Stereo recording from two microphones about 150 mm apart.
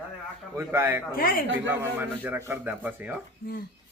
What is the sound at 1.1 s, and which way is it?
Speech, 75° left (ahead or behind).